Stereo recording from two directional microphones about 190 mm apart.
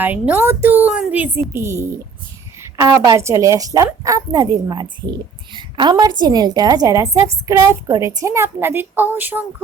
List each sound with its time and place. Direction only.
0.0 s a woman's voice: 10° right (ahead or behind)